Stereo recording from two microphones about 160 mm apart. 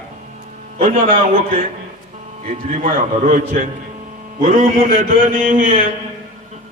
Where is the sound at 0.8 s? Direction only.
45° right (ahead or behind).